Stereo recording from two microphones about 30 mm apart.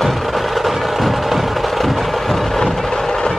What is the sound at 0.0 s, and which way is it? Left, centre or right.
Music, centre.